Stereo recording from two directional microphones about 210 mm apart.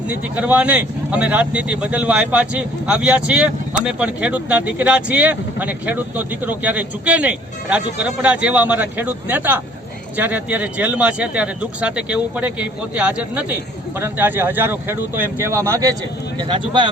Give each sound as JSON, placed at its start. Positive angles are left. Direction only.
{"t": 0.1, "sound": "speech", "side_deg": -5}